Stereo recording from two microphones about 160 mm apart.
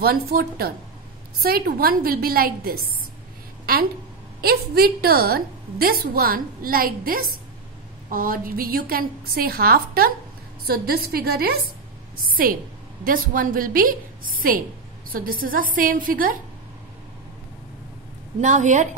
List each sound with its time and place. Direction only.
0.0 s a woman's voice: 75° right (ahead or behind)
3.7 s a sound: 70° right (ahead or behind)
4.4 s a woman's voice: 70° right (ahead or behind)
13.0 s a woman's voice: 60° right (ahead or behind)
18.4 s a woman's voice: 50° right (ahead or behind)